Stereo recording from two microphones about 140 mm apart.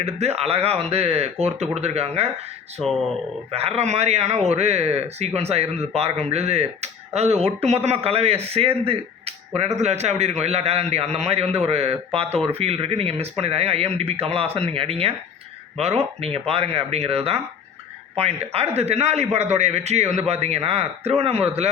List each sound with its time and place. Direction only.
0.0 s speech: 50° right (ahead or behind)
3.5 s speech: 45° right (ahead or behind)
18.5 s speech: 45° right (ahead or behind)